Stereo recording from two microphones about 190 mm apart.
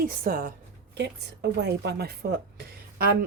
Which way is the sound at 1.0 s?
65° right (ahead or behind).